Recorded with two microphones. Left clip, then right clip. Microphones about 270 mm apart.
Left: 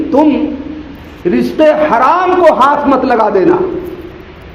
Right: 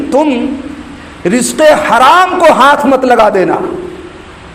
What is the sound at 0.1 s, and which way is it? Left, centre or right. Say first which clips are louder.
A woman's voice: even; right.